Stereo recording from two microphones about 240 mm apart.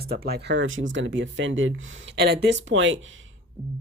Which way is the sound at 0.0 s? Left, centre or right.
Right.